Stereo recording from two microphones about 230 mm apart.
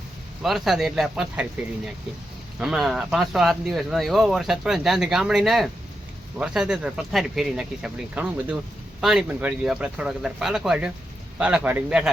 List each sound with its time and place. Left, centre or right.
0.4 s speech: centre